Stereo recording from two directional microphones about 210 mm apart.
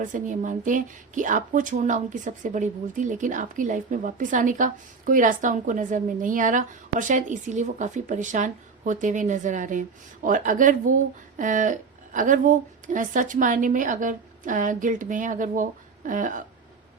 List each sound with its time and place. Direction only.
0.0 s speech: 35° right (ahead or behind)